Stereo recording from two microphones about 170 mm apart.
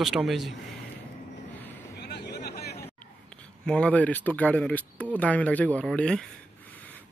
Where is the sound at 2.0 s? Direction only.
75° left (ahead or behind).